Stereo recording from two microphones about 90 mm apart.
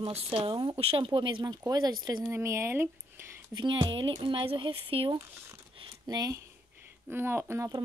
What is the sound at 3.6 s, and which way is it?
Speech, 60° right (ahead or behind).